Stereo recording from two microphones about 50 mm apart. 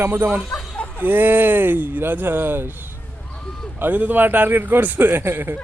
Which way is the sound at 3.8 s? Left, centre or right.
Right.